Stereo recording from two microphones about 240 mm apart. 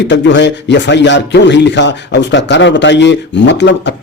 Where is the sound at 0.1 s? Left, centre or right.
Left.